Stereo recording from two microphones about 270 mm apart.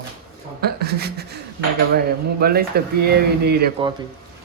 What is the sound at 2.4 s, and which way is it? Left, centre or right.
Speech, right.